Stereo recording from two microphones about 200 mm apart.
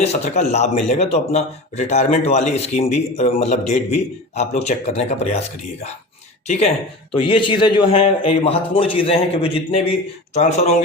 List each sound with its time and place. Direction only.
0.0 s a man's voice: 35° left (ahead or behind)
7.2 s a man's voice: 25° left (ahead or behind)